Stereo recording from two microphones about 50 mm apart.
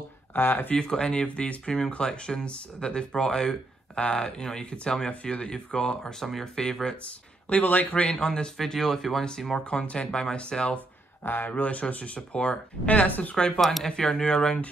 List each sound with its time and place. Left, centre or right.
0.3 s speech: left
0.7 s speech: centre
7.4 s speech: left
8.3 s speech: centre
9.7 s speech: left
11.2 s speech: left
13.6 s speech: centre